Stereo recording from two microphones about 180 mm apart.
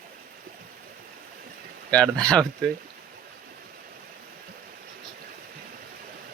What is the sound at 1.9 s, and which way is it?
Speech, 5° left (ahead or behind).